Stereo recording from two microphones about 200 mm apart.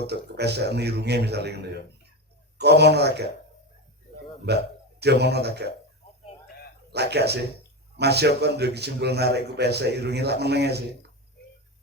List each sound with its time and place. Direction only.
0.1 s a man's voice: 55° right (ahead or behind)
4.4 s a man's voice: 55° right (ahead or behind)
6.9 s a man's voice: 55° right (ahead or behind)